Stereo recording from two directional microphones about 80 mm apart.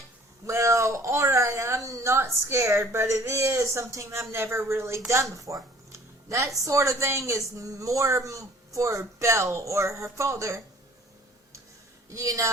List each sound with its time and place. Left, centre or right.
0.4 s a woman's voice: right
5.9 s a sound: right
6.7 s a woman's voice: right
12.1 s a woman's voice: right